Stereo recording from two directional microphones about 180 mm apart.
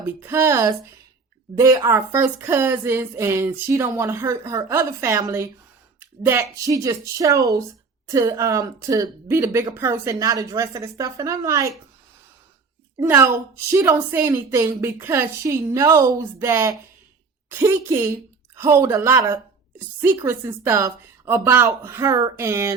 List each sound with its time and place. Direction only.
0.0 s a woman's voice: 15° right (ahead or behind)
13.0 s a woman's voice: 15° right (ahead or behind)